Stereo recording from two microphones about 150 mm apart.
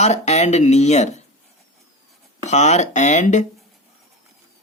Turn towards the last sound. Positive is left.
turn(degrees=55)  # may be behind; listen again after turning